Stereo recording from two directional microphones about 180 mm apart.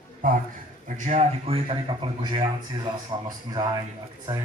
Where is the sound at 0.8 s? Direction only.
45° right (ahead or behind); by 3.8 s 20° right (ahead or behind).